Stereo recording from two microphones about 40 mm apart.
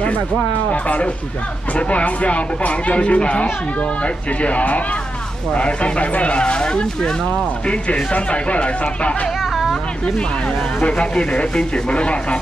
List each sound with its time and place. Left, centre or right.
0.7 s a man's voice: left
9.4 s vehicle: centre
10.8 s speech: left